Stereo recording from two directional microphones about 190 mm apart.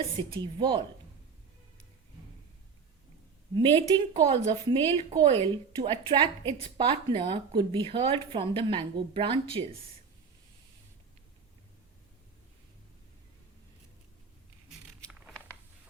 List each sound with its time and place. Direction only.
0.3 s a woman's voice: 25° right (ahead or behind)
3.5 s a woman's voice: 25° right (ahead or behind)
14.7 s a sound: centre (ahead or behind)